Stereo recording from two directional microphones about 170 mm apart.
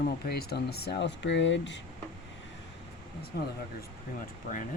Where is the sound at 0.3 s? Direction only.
70° left (ahead or behind); by 1.8 s 90° left.